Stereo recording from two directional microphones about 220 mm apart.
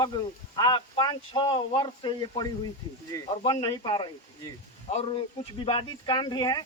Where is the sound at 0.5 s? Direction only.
20° left (ahead or behind).